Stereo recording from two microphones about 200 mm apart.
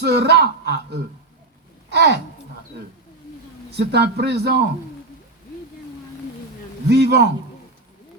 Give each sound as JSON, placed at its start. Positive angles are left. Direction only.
{"t": 0.0, "sound": "speech", "side_deg": -55}
{"t": 1.9, "sound": "speech", "side_deg": -55}
{"t": 3.8, "sound": "speech", "side_deg": -55}
{"t": 6.8, "sound": "speech", "side_deg": -55}